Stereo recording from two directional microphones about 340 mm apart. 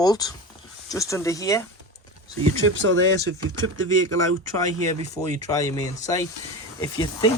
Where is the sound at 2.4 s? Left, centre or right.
Right.